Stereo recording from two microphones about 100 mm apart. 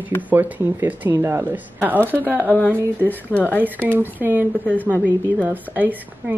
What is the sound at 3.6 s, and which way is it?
A woman's voice, 15° right (ahead or behind).